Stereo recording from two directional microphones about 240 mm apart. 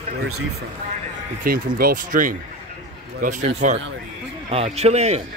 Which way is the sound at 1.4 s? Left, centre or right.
Right.